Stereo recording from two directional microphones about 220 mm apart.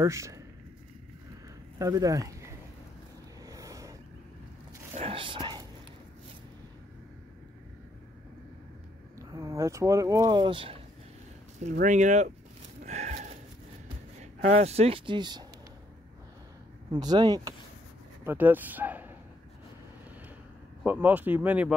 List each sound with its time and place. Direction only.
0.0 s speech: 15° right (ahead or behind)
1.8 s speech: 15° right (ahead or behind)
3.4 s a sound: 15° right (ahead or behind)
4.9 s whispering: 25° right (ahead or behind)
9.2 s speech: 15° right (ahead or behind)
11.7 s speech: 35° right (ahead or behind)
12.8 s a sound: 30° right (ahead or behind)
14.2 s speech: 30° right (ahead or behind)
16.9 s speech: 20° right (ahead or behind)
20.8 s speech: 5° right (ahead or behind)